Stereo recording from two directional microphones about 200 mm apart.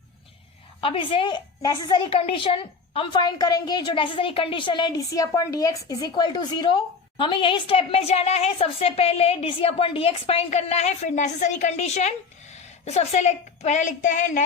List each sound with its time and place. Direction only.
0.8 s a woman's voice: 25° left (ahead or behind)